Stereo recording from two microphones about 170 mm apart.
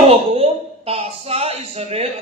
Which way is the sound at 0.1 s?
35° right (ahead or behind).